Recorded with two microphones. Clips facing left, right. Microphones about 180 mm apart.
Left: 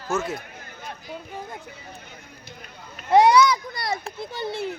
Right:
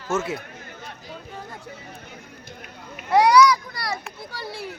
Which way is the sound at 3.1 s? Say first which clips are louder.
Even; 25° left (ahead or behind).